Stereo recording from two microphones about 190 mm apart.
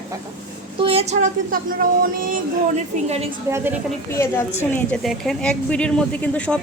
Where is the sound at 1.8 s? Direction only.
45° right (ahead or behind).